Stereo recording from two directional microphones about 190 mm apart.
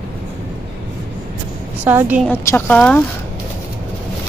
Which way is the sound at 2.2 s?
10° left (ahead or behind).